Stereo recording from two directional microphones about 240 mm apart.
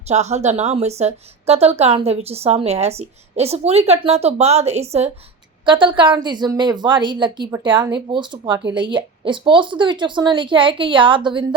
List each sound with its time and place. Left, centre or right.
0.1 s a woman's voice: right